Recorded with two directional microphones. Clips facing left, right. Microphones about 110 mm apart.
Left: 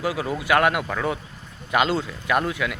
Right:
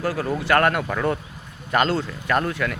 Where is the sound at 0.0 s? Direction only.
10° left (ahead or behind).